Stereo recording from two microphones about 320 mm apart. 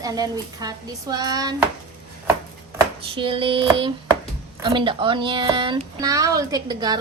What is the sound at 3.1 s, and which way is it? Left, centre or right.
Speech, centre.